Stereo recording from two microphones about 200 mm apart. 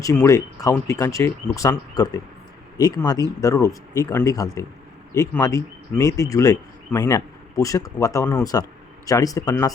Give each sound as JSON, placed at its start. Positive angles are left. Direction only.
{"t": 0.0, "sound": "speech", "side_deg": 15}